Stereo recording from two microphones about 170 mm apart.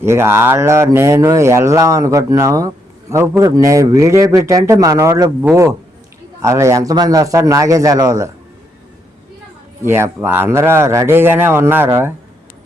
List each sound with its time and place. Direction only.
0.0 s a man's voice: 15° right (ahead or behind)
9.8 s speech: 15° right (ahead or behind)